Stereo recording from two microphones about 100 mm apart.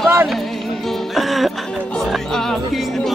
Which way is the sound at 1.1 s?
Centre (ahead or behind).